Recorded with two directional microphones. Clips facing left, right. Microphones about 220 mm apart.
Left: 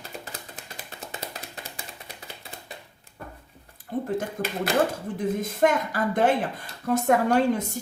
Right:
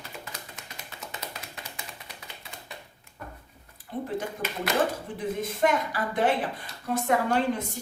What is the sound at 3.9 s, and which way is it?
Speech, 45° left (ahead or behind).